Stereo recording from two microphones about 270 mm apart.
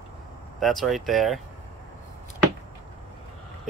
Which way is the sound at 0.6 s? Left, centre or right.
Centre.